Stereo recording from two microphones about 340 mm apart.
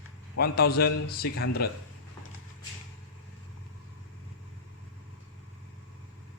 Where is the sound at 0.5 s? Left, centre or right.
Left.